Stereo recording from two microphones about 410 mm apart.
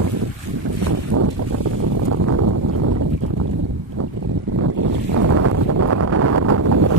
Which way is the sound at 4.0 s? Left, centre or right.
Right.